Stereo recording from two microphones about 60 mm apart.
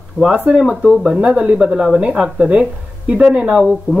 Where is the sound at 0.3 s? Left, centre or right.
Right.